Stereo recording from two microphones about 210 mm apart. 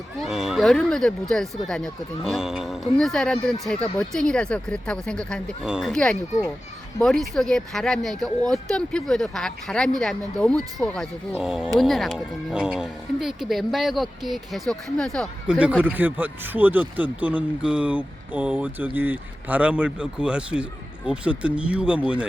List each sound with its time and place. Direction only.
0.2 s speech: centre (ahead or behind)